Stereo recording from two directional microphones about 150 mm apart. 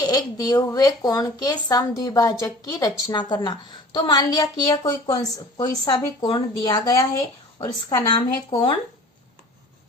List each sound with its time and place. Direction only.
0.1 s speech: 25° left (ahead or behind)
5.0 s speech: 40° left (ahead or behind)
5.5 s speech: 25° left (ahead or behind)